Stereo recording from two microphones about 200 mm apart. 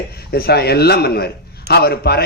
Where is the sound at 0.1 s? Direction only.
50° left (ahead or behind).